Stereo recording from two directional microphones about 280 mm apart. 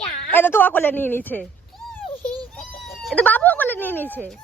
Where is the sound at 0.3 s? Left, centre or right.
Centre.